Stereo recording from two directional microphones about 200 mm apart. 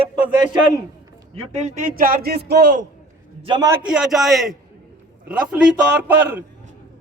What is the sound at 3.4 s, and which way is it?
Speech, 25° right (ahead or behind).